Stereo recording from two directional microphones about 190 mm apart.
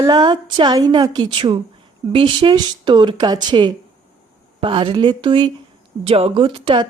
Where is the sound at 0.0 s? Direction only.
20° right (ahead or behind).